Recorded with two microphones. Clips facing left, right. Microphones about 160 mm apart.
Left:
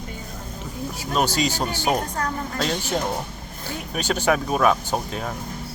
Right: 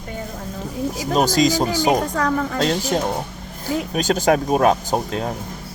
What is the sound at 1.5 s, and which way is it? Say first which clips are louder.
Speech: right 6 dB; 90° right.